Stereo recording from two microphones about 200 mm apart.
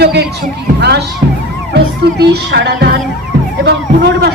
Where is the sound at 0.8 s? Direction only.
55° right (ahead or behind).